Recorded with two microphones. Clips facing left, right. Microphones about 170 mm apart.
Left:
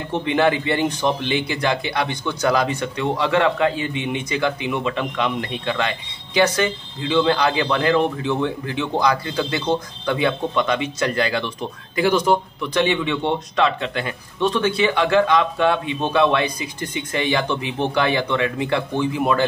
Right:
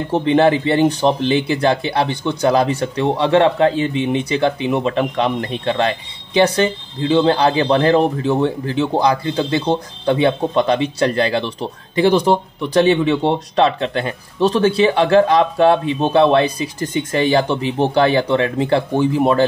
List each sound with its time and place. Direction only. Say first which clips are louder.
0.1 s speech: right 5 dB; 35° right (ahead or behind)